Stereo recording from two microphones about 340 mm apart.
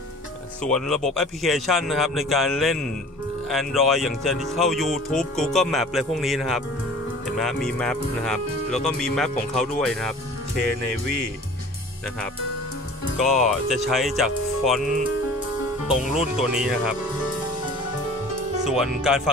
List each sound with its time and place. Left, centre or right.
0.7 s speech: centre
13.2 s speech: centre
16.1 s speech: centre
18.6 s speech: centre